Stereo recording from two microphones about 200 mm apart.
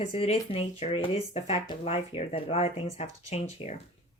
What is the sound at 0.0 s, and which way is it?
Speech, 30° left (ahead or behind).